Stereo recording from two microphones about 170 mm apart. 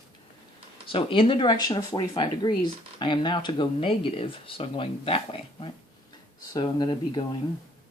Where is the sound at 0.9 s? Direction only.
30° left (ahead or behind).